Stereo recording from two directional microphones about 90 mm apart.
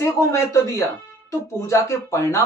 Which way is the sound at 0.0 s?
30° left (ahead or behind).